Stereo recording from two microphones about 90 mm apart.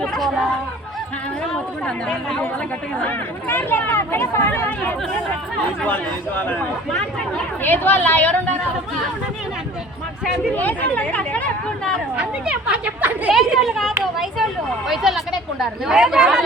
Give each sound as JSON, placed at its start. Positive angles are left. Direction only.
{"t": 0.0, "sound": "speech", "side_deg": 0}
{"t": 3.0, "sound": "speech", "side_deg": 20}
{"t": 10.5, "sound": "speech", "side_deg": 20}
{"t": 12.1, "sound": "speech", "side_deg": -15}
{"t": 13.3, "sound": "speech", "side_deg": 0}